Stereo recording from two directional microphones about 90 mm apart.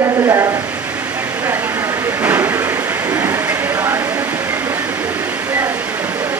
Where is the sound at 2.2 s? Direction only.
25° right (ahead or behind).